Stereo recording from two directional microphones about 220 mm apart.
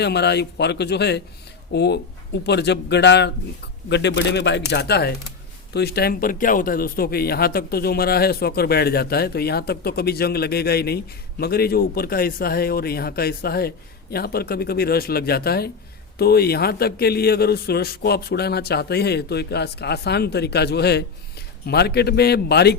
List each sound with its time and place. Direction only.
0.0 s speech: 50° left (ahead or behind)